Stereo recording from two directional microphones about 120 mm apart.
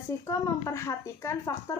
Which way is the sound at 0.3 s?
25° left (ahead or behind).